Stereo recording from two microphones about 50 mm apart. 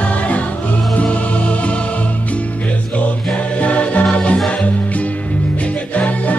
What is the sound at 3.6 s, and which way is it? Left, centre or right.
Music, left.